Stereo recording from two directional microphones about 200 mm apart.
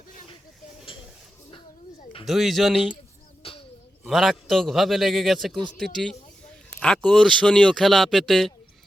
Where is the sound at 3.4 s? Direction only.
25° left (ahead or behind).